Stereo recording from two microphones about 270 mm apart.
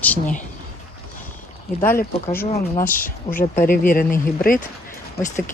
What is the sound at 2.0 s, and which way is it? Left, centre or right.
Speech, left.